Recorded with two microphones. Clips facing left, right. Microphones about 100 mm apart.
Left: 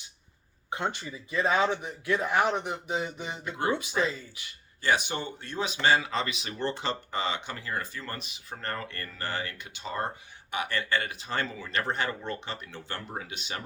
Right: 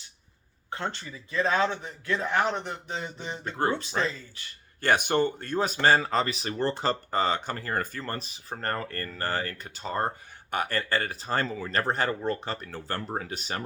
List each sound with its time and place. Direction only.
0.7 s a man's voice: 15° left (ahead or behind)
4.8 s speech: 55° right (ahead or behind)